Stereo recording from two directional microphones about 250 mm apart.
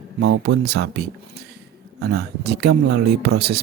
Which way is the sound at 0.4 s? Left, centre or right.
Right.